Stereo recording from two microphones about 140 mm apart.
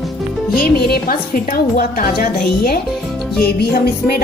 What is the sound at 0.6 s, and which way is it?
A woman's voice, 90° left.